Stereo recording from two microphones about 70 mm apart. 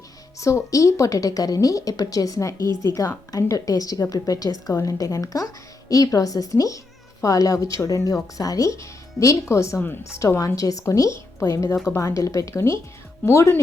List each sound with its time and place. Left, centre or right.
0.3 s a woman's voice: left
9.7 s a woman's voice: left
10.2 s speech: left
11.3 s speech: left